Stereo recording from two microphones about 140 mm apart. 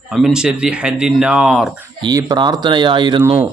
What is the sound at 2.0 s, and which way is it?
Speech, 30° right (ahead or behind).